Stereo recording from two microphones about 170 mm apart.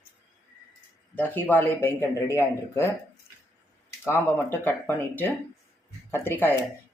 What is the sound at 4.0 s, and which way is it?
Speech, 15° left (ahead or behind).